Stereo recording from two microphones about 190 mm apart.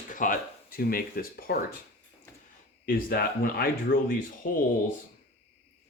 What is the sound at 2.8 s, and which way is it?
Speech, 50° left (ahead or behind).